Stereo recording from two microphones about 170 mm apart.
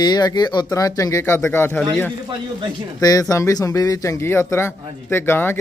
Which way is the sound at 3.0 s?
20° left (ahead or behind).